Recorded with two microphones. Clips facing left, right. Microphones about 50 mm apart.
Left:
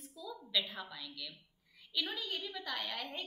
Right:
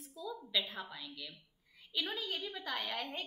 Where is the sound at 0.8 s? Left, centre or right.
Centre.